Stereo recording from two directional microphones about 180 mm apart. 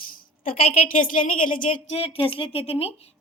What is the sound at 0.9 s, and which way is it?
A woman's voice, 50° left (ahead or behind).